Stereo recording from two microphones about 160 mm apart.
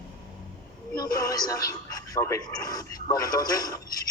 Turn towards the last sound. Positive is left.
turn(degrees=25)  # may be behind; listen again after turning